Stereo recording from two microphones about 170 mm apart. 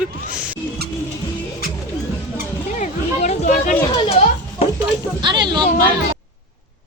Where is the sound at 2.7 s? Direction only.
45° left (ahead or behind).